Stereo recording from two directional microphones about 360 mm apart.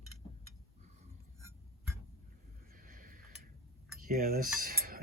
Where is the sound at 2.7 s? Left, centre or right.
Right.